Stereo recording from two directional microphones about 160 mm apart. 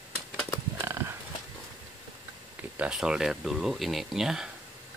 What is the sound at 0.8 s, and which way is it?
Horse, 15° right (ahead or behind).